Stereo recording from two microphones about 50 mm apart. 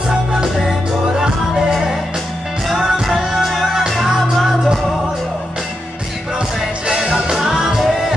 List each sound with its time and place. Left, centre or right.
1.1 s music: centre
6.9 s music: centre